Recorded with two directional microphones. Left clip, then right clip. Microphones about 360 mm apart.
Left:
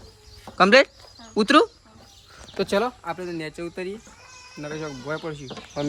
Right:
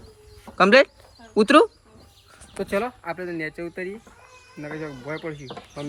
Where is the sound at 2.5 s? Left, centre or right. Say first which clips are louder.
Left 3 dB; centre.